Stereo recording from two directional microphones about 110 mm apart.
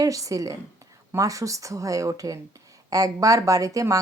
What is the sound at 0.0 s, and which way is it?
A woman's voice, 30° right (ahead or behind).